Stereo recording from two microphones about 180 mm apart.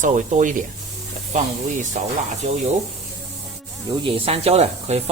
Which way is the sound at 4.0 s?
30° right (ahead or behind).